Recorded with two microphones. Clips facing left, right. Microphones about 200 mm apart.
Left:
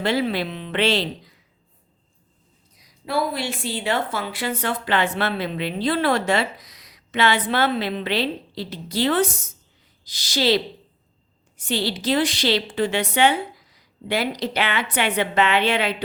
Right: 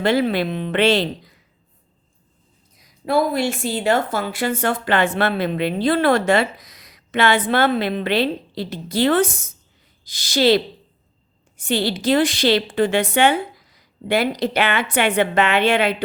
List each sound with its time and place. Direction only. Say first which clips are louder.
0.0 s a woman's voice: right 4 dB; 50° right (ahead or behind)
2.7 s a woman's voice: right 5 dB; 50° right (ahead or behind)